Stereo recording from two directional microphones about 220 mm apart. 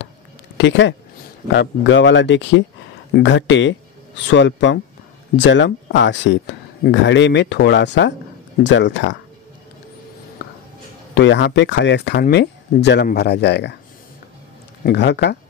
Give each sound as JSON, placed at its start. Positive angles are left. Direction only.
{"t": 0.6, "sound": "speech", "side_deg": 55}
{"t": 11.1, "sound": "speech", "side_deg": 55}
{"t": 14.8, "sound": "speech", "side_deg": 50}